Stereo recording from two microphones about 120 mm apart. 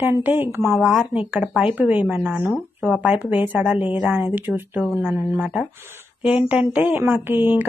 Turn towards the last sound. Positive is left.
turn(degrees=-15)  # may be behind; listen again after turning